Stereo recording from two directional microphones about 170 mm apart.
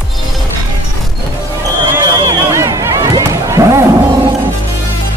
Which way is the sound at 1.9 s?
20° right (ahead or behind).